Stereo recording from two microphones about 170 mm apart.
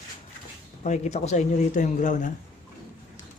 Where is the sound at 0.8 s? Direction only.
40° left (ahead or behind).